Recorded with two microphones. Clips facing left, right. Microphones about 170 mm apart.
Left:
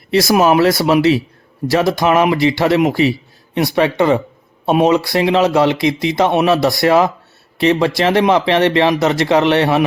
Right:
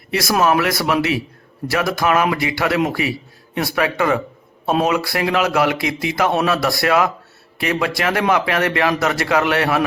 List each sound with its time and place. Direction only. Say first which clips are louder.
0.1 s speech: left 5 dB; 25° left (ahead or behind)